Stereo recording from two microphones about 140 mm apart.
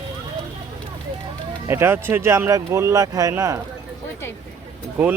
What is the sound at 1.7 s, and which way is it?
Speech, 15° right (ahead or behind).